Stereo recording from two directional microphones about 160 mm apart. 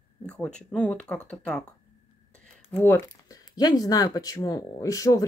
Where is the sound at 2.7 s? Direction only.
15° left (ahead or behind).